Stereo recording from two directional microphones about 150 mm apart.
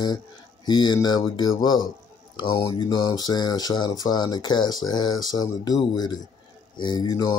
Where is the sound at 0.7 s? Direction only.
30° left (ahead or behind).